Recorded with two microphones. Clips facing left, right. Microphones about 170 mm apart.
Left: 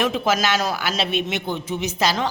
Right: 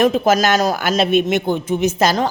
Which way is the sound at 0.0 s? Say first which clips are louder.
Right 7 dB; 40° right (ahead or behind).